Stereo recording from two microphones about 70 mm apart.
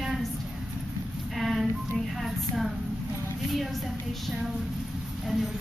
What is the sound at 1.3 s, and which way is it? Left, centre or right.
A woman's voice, centre.